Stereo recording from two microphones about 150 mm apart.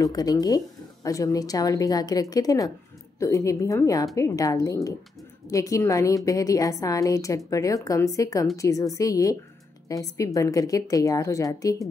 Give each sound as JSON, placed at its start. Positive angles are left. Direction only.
{"t": 0.0, "sound": "a woman's voice", "side_deg": 25}